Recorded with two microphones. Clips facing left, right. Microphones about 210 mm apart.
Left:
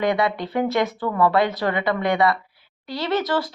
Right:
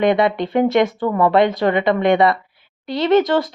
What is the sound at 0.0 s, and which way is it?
Speech, 25° right (ahead or behind).